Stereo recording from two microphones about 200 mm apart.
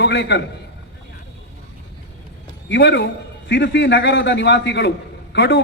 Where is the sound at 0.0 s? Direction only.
60° left (ahead or behind).